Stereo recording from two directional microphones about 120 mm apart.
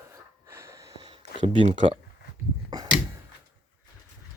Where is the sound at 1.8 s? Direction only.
50° right (ahead or behind).